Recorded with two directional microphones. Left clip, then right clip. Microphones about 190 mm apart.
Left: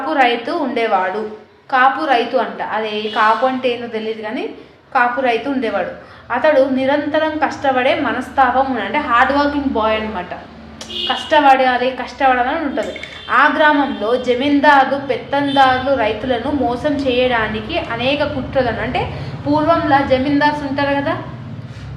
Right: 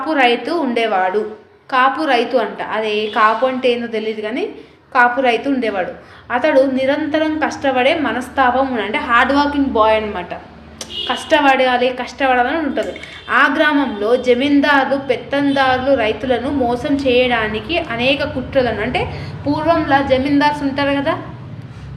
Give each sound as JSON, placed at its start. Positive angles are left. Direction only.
{"t": 0.1, "sound": "a woman's voice", "side_deg": -55}